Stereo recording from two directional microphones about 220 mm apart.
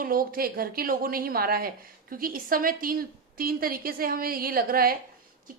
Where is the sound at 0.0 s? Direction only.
40° right (ahead or behind).